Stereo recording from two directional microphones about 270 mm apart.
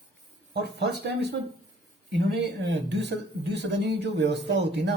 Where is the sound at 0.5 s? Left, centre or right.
Right.